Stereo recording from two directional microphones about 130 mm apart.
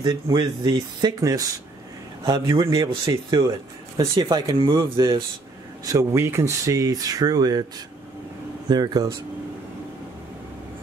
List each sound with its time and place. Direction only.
0.0 s speech: 35° right (ahead or behind)
8.6 s speech: 30° right (ahead or behind)